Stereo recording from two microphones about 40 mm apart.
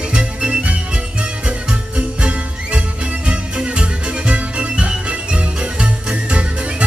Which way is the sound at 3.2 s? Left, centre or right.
Right.